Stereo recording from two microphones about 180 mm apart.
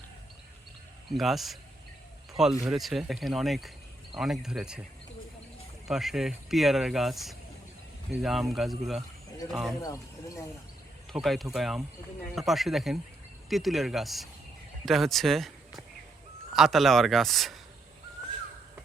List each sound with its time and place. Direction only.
1.1 s speech: centre (ahead or behind)
5.9 s speech: centre (ahead or behind)
9.8 s speech: 20° left (ahead or behind)
11.1 s speech: centre (ahead or behind)